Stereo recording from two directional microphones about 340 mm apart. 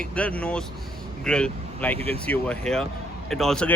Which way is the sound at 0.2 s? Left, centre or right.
Centre.